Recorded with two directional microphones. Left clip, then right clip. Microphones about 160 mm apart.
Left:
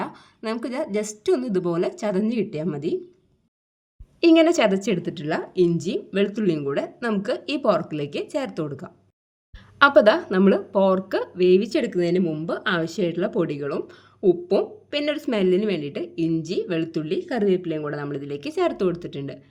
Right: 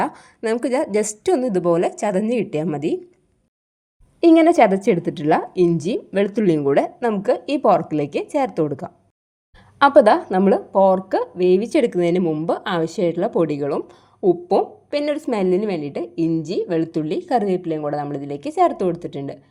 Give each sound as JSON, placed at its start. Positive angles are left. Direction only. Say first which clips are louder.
{"t": 0.0, "sound": "a woman's voice", "louder": "right 8 dB", "side_deg": -30}
{"t": 4.2, "sound": "a woman's voice", "louder": "right 4 dB", "side_deg": -25}
{"t": 10.4, "sound": "speech", "louder": "right 2 dB", "side_deg": -15}
{"t": 11.8, "sound": "a woman's voice", "louder": "right 5 dB", "side_deg": -40}
{"t": 12.3, "sound": "speech", "louder": "right 3 dB", "side_deg": -25}